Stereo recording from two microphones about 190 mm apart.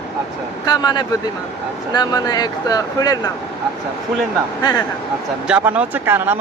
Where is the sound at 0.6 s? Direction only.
20° left (ahead or behind).